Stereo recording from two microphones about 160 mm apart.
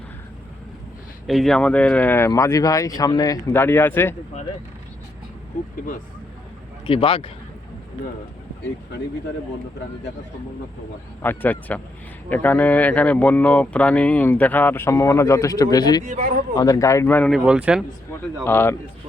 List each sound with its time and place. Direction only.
1.3 s speech: centre (ahead or behind)
6.8 s a man's voice: 35° left (ahead or behind)
11.2 s speech: 10° left (ahead or behind)
16.0 s speech: 40° right (ahead or behind)
16.6 s speech: 20° left (ahead or behind)
17.3 s speech: 5° right (ahead or behind)
18.4 s speech: 15° left (ahead or behind)